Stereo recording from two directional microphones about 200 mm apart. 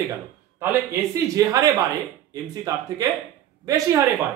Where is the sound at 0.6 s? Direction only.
15° right (ahead or behind).